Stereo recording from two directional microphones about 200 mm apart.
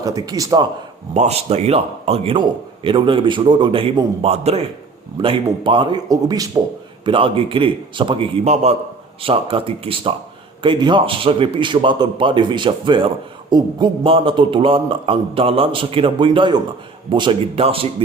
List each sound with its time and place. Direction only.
0.0 s speech: 20° right (ahead or behind)
1.1 s a man's voice: 35° right (ahead or behind)